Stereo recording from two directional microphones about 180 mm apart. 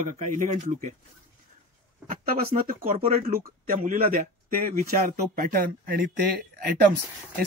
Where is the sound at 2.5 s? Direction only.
50° right (ahead or behind).